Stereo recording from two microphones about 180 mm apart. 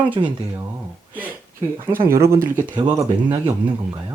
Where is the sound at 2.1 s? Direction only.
15° right (ahead or behind).